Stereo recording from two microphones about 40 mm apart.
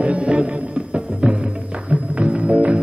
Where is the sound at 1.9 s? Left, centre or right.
Right.